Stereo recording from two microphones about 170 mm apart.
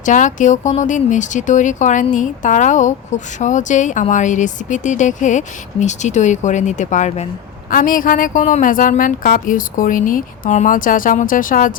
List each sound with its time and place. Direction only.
0.0 s a woman's voice: 50° left (ahead or behind)